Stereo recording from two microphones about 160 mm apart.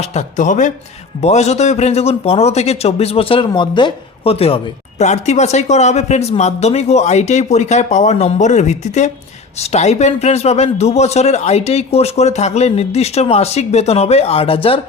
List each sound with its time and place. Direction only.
0.1 s a man's voice: 50° left (ahead or behind)